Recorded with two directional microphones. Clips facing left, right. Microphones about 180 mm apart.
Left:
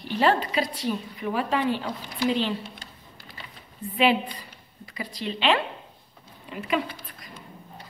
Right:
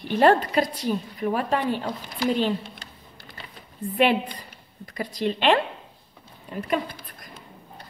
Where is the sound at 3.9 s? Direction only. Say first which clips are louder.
Right 1 dB; 50° right (ahead or behind).